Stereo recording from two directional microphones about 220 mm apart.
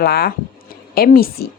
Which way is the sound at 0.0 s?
45° left (ahead or behind).